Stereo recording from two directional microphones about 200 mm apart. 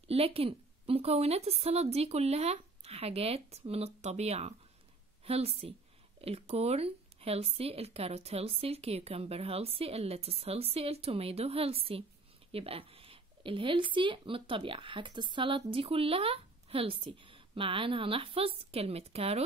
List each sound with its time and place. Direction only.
0.1 s a woman's voice: 30° right (ahead or behind)